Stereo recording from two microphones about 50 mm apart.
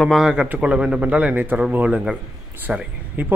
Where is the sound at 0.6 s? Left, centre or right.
Right.